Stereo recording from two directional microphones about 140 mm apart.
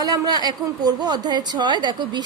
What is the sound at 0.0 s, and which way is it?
A woman's voice, 30° right (ahead or behind).